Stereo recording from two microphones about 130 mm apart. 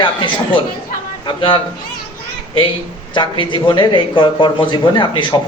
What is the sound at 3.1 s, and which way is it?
A man's voice, 40° left (ahead or behind).